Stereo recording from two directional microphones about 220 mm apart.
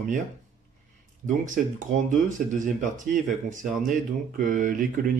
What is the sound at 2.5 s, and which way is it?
Speech, 35° right (ahead or behind).